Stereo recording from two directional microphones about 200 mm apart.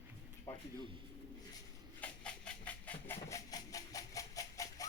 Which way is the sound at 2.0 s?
5° left (ahead or behind).